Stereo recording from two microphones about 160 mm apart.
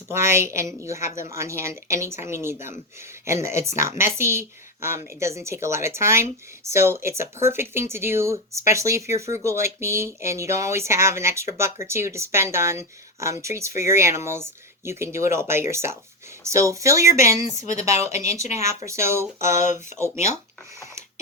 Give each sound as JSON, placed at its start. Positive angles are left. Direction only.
{"t": 0.1, "sound": "speech", "side_deg": -15}